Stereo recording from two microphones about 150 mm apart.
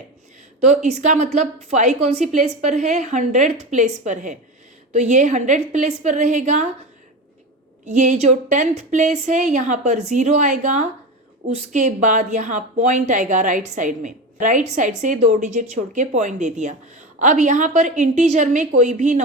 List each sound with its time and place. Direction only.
0.6 s a woman's voice: 50° right (ahead or behind)
7.9 s a woman's voice: 50° right (ahead or behind)